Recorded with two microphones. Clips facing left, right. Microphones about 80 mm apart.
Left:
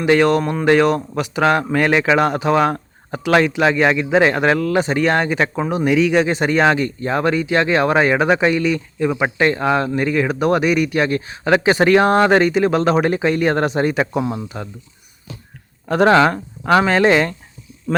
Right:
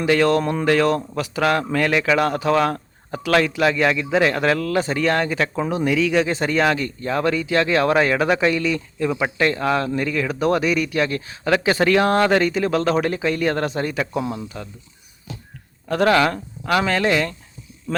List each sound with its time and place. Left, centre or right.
0.1 s speech: centre
15.9 s speech: left